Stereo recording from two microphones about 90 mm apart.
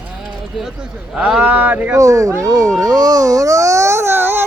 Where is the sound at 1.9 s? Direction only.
40° right (ahead or behind).